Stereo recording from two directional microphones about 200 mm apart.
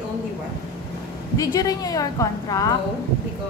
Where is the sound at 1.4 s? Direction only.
20° left (ahead or behind).